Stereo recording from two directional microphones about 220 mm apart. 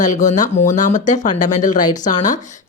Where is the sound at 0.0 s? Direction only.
35° left (ahead or behind).